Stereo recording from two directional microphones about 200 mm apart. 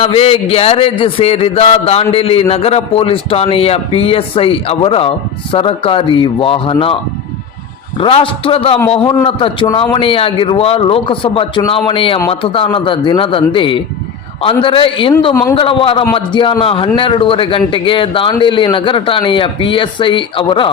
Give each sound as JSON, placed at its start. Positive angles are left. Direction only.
{"t": 0.0, "sound": "a man's voice", "side_deg": 30}